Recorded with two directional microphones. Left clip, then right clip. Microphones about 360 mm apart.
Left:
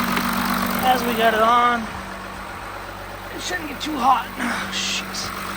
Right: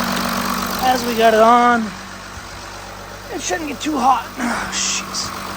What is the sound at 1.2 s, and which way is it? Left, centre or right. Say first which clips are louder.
Speech: right 6 dB; centre.